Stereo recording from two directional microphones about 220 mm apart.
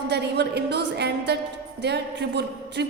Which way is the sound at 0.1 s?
50° right (ahead or behind).